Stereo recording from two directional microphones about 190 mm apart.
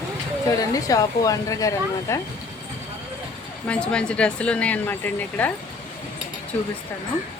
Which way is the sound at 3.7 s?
5° left (ahead or behind).